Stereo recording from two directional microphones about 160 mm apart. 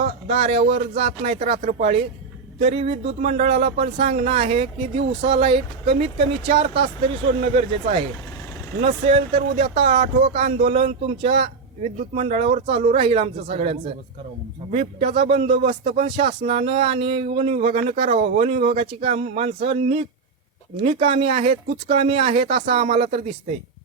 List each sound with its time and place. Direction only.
0.0 s speech: 40° right (ahead or behind)